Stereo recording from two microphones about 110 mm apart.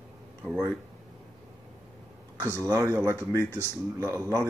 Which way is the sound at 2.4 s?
30° right (ahead or behind).